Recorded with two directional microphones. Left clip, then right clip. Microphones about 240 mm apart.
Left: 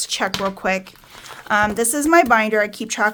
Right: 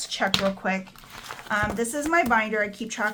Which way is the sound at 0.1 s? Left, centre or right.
Left.